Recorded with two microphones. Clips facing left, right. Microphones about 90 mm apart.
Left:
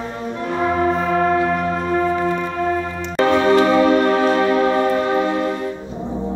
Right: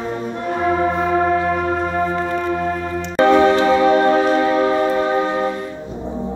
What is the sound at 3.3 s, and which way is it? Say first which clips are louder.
Music: left 3 dB; 25° right (ahead or behind).